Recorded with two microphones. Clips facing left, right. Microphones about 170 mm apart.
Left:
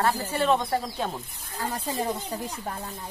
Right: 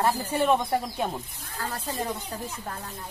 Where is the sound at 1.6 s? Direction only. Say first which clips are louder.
Left 3 dB; 15° left (ahead or behind).